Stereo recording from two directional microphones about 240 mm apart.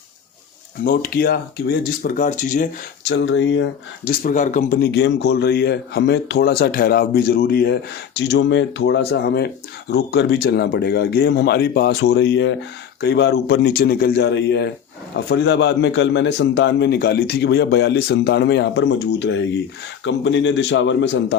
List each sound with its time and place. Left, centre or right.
0.9 s a man's voice: left
3.1 s a man's voice: left
4.2 s a man's voice: left